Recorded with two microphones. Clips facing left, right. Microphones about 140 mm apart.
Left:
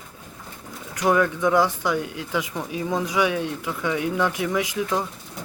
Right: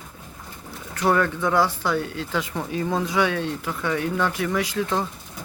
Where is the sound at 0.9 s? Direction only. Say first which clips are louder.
Left 1 dB; 15° left (ahead or behind).